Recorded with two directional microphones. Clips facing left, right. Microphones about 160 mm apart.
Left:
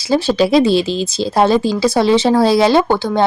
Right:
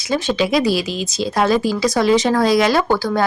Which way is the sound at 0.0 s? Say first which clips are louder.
Left 5 dB; 30° left (ahead or behind).